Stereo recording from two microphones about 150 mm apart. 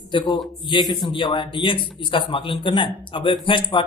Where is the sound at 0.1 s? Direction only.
35° left (ahead or behind).